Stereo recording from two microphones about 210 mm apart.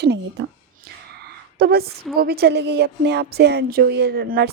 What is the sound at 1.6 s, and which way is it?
A woman's voice, 50° right (ahead or behind).